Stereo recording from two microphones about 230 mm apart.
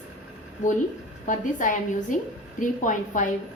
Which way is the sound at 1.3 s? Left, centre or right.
Left.